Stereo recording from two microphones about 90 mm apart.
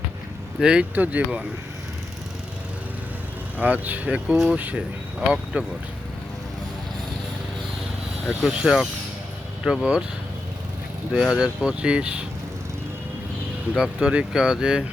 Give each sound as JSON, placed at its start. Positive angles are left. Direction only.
{"t": 0.6, "sound": "speech", "side_deg": -10}
{"t": 3.6, "sound": "speech", "side_deg": -20}
{"t": 8.3, "sound": "speech", "side_deg": -5}
{"t": 11.1, "sound": "speech", "side_deg": -5}
{"t": 13.7, "sound": "speech", "side_deg": -10}